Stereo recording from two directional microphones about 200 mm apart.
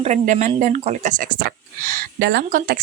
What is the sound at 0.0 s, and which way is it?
Speech, 35° right (ahead or behind).